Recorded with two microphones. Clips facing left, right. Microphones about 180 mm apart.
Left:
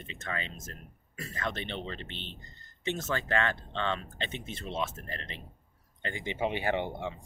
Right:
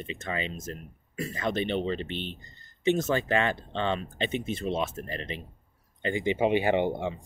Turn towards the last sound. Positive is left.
turn(degrees=-15)  # may be behind; listen again after turning